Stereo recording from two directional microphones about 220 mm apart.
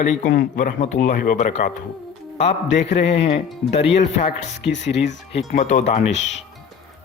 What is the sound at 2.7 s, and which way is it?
Speech, 55° left (ahead or behind).